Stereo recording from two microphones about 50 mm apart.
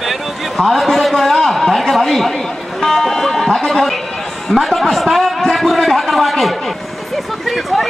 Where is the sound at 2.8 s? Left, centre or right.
Centre.